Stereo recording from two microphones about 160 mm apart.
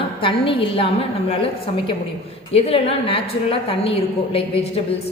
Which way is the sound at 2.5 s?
40° left (ahead or behind).